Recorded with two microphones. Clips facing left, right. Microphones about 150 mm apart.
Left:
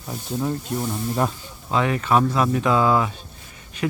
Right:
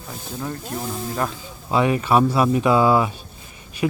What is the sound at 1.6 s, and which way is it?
Speech, 15° right (ahead or behind).